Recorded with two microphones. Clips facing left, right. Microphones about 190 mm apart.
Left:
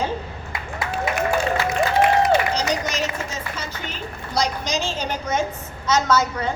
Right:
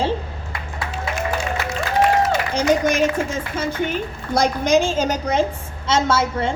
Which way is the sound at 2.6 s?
55° right (ahead or behind).